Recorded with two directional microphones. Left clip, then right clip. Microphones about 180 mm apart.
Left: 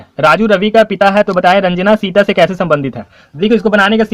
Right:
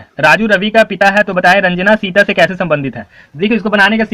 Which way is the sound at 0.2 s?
35° left (ahead or behind).